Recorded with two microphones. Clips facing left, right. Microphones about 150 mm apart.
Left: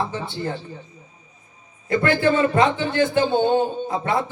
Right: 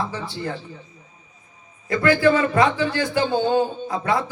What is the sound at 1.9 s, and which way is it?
A man's voice, 25° left (ahead or behind).